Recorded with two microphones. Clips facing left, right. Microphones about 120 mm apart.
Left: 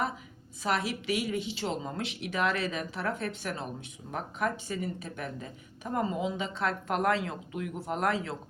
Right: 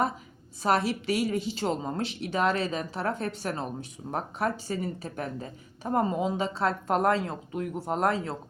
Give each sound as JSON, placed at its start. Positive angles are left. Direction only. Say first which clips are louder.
{"t": 0.6, "sound": "speech", "louder": "right 5 dB", "side_deg": -35}